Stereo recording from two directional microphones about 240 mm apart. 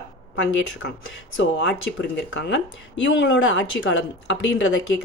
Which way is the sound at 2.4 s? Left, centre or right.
Left.